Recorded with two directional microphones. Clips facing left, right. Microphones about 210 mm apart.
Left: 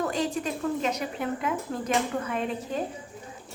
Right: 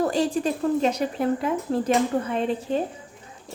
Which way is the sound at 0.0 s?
35° right (ahead or behind).